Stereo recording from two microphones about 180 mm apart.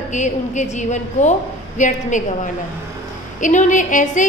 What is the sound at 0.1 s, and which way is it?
A woman's voice, 45° left (ahead or behind).